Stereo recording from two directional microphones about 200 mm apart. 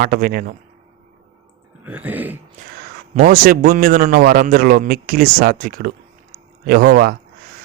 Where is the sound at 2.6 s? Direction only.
35° right (ahead or behind).